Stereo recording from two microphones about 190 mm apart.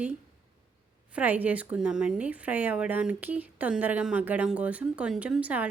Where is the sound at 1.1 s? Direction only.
10° right (ahead or behind).